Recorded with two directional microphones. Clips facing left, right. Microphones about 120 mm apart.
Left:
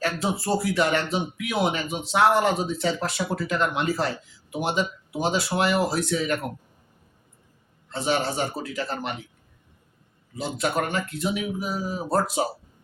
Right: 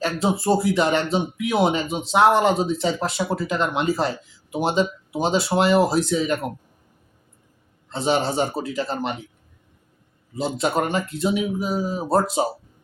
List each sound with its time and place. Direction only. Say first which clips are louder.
0.0 s speech: right 4 dB; 25° right (ahead or behind)
7.9 s speech: right 4 dB; 25° right (ahead or behind)
10.3 s speech: right 4 dB; 25° right (ahead or behind)